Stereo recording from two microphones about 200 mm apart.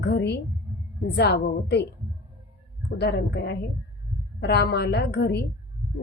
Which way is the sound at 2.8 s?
55° left (ahead or behind).